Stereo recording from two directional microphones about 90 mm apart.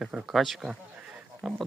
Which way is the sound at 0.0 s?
5° right (ahead or behind).